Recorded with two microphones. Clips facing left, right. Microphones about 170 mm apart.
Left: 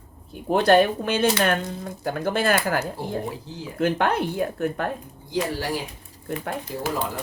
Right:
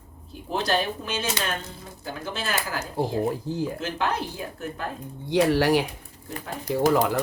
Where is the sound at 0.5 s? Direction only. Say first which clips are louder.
Left 8 dB; 55° left (ahead or behind).